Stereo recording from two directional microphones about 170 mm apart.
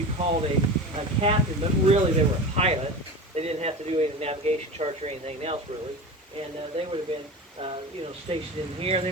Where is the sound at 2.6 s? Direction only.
35° right (ahead or behind).